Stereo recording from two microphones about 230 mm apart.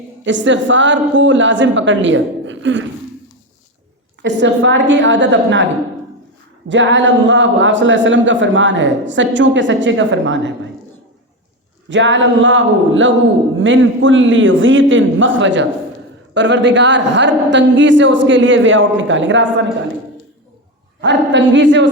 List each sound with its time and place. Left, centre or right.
0.3 s a man's voice: right
4.2 s a man's voice: right
6.7 s a man's voice: right
11.9 s a man's voice: right
21.0 s a man's voice: right